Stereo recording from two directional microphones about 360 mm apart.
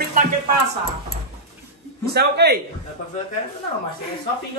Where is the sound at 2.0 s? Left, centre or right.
Right.